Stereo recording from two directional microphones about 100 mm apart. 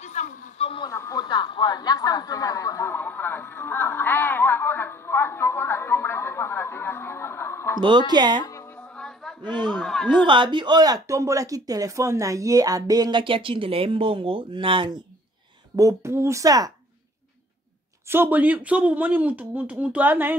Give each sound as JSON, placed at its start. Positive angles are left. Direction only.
{"t": 0.6, "sound": "a sound", "side_deg": 70}
{"t": 0.8, "sound": "speech", "side_deg": 35}
{"t": 1.2, "sound": "speech", "side_deg": 50}
{"t": 2.9, "sound": "speech", "side_deg": 15}
{"t": 8.1, "sound": "speech", "side_deg": -50}
{"t": 8.9, "sound": "a sound", "side_deg": 5}
{"t": 9.4, "sound": "a sound", "side_deg": -50}
{"t": 9.8, "sound": "a sound", "side_deg": 5}
{"t": 10.2, "sound": "speech", "side_deg": -55}
{"t": 13.1, "sound": "speech", "side_deg": -60}
{"t": 15.7, "sound": "speech", "side_deg": -35}
{"t": 18.0, "sound": "speech", "side_deg": -20}